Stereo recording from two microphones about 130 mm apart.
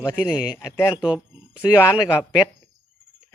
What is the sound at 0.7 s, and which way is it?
Speech, 20° left (ahead or behind).